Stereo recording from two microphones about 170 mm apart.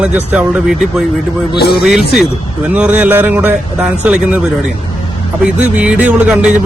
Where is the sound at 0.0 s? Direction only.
10° right (ahead or behind).